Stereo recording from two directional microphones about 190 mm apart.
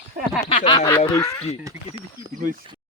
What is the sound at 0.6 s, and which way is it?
Speech, 20° left (ahead or behind).